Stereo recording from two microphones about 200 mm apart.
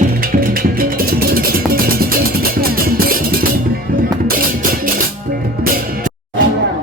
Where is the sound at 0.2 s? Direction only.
45° right (ahead or behind).